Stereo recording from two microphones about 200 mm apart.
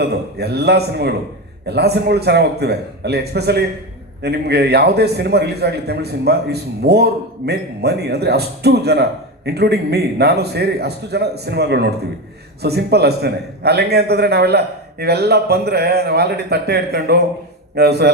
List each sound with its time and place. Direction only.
0.0 s a man's voice: 55° right (ahead or behind)